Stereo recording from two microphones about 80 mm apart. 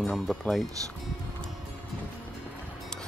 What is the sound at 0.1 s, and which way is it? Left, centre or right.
Speech, centre.